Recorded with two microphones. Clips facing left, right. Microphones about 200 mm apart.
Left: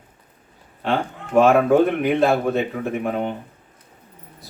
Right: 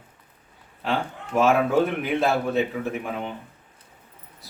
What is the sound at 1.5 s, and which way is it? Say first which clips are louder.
A man's voice: left 4 dB; 55° left (ahead or behind).